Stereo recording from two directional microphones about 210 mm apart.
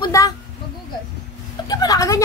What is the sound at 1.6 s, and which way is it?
Speech, 15° left (ahead or behind).